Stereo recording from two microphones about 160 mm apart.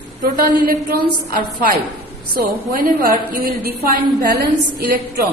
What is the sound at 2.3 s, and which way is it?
A woman's voice, 70° right (ahead or behind).